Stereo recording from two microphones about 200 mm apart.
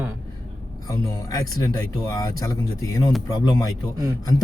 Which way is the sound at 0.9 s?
15° left (ahead or behind).